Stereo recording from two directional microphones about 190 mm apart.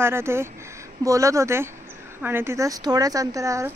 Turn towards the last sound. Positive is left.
turn(degrees=-15)  # may be behind; listen again after turning